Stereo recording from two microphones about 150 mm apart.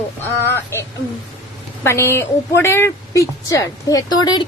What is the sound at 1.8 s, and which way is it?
A woman's voice, 15° left (ahead or behind).